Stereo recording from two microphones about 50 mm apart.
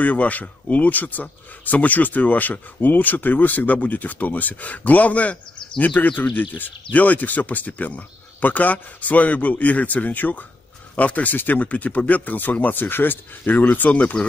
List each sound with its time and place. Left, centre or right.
0.0 s speech: left